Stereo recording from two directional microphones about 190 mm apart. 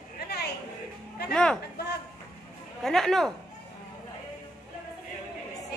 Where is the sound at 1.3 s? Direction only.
5° left (ahead or behind).